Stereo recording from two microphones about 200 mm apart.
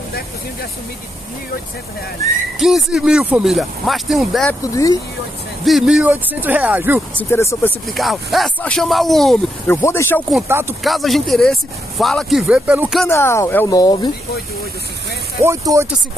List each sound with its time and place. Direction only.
2.6 s speech: centre (ahead or behind)
5.7 s speech: centre (ahead or behind)
7.2 s speech: 10° left (ahead or behind)
7.8 s speech: centre (ahead or behind)
10.5 s speech: 10° right (ahead or behind)
10.8 s speech: centre (ahead or behind)
13.0 s speech: 10° left (ahead or behind)
15.4 s speech: 15° right (ahead or behind)